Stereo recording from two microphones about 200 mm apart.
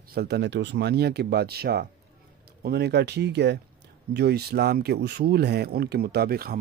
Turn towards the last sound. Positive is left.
turn(degrees=-50)  # may be behind; listen again after turning